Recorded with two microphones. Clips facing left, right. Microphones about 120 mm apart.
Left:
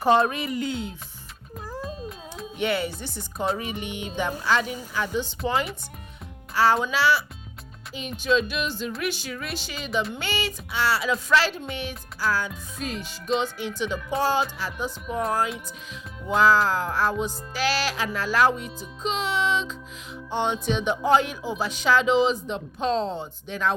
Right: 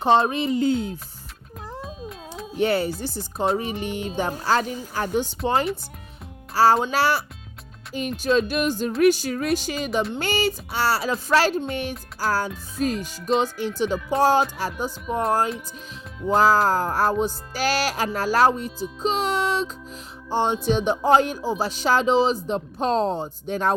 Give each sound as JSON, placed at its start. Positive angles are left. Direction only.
{"t": 0.0, "sound": "speech", "side_deg": -25}
{"t": 0.7, "sound": "speech", "side_deg": -45}
{"t": 1.8, "sound": "music", "side_deg": 0}
{"t": 2.6, "sound": "speech", "side_deg": -35}
{"t": 5.4, "sound": "speech", "side_deg": -35}
{"t": 6.9, "sound": "speech", "side_deg": -45}
{"t": 14.7, "sound": "music", "side_deg": 0}
{"t": 16.3, "sound": "speech", "side_deg": -40}